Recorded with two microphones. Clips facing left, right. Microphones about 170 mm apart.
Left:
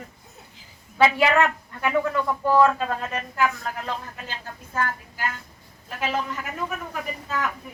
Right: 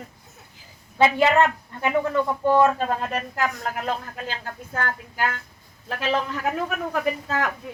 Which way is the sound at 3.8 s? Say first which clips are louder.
Right 4 dB; 60° right (ahead or behind).